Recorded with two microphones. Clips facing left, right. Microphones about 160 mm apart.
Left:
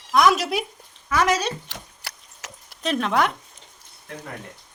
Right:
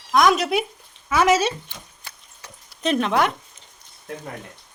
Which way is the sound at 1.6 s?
90° left.